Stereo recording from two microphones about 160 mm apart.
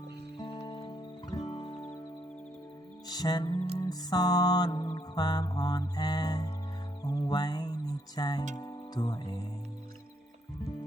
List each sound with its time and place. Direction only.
0.3 s music: 30° left (ahead or behind)
3.1 s music: 25° left (ahead or behind)
8.5 s speech: 25° left (ahead or behind)